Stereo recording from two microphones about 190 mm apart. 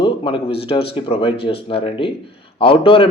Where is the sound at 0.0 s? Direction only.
25° left (ahead or behind).